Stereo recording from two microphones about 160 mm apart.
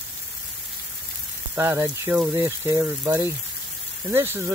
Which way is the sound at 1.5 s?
15° right (ahead or behind).